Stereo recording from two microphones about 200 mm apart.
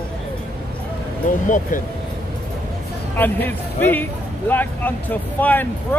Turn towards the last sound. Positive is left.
turn(degrees=10)  # may be behind; listen again after turning